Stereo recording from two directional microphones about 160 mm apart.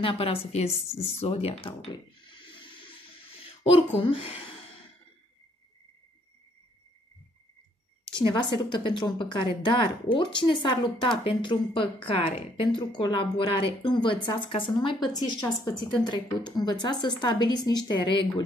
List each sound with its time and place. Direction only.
0.0 s speech: 35° left (ahead or behind)
2.5 s water: 30° left (ahead or behind)
3.7 s a woman's voice: 35° left (ahead or behind)
8.1 s a woman's voice: 30° left (ahead or behind)